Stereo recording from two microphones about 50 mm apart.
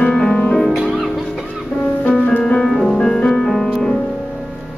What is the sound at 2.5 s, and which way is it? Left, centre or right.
Music, centre.